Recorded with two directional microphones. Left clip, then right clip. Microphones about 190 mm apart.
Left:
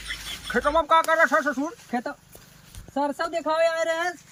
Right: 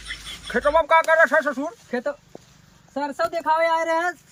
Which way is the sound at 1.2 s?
15° right (ahead or behind).